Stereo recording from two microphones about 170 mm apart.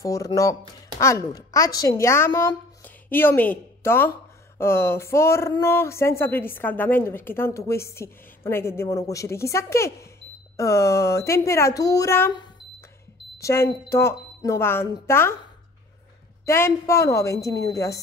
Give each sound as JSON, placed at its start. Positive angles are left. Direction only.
{"t": 0.0, "sound": "a woman's voice", "side_deg": 20}
{"t": 16.4, "sound": "a woman's voice", "side_deg": 15}